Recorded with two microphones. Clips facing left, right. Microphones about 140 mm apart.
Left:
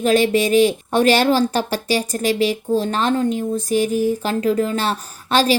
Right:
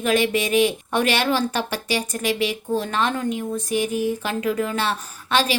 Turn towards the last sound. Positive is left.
turn(degrees=35)  # may be behind; listen again after turning